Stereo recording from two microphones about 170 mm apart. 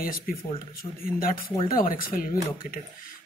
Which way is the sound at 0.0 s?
55° left (ahead or behind).